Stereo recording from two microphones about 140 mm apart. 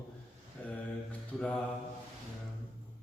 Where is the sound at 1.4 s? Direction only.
5° left (ahead or behind).